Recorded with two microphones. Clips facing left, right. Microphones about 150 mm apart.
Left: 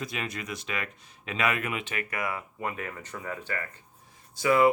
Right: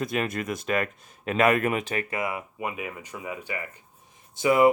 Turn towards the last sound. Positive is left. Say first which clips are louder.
# right 3 dB
turn(degrees=-20)  # may be behind; listen again after turning